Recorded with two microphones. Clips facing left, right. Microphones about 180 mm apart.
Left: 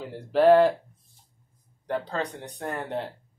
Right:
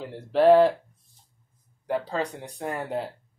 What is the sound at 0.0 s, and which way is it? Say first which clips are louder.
Speech: even; centre (ahead or behind).